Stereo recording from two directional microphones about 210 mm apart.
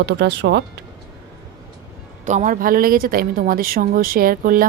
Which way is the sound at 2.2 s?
35° right (ahead or behind).